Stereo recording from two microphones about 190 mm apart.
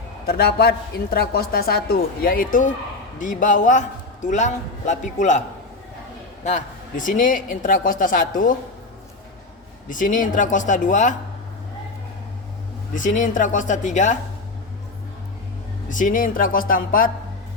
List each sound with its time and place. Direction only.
0.3 s a man's voice: 55° left (ahead or behind); by 5.4 s 40° left (ahead or behind)
6.4 s a man's voice: 40° left (ahead or behind)
9.9 s a man's voice: 45° left (ahead or behind)
12.9 s a man's voice: 45° left (ahead or behind)
15.9 s a man's voice: 45° left (ahead or behind)